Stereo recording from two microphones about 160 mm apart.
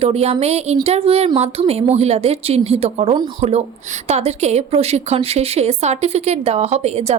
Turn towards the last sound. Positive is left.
turn(degrees=-40)  # may be behind; listen again after turning